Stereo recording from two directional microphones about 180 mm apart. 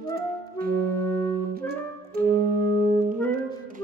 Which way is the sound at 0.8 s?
10° left (ahead or behind).